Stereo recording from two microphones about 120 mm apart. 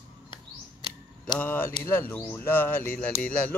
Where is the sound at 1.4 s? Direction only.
15° left (ahead or behind).